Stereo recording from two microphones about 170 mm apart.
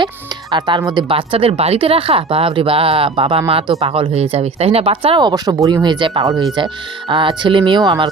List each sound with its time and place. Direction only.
0.5 s speech: 25° right (ahead or behind)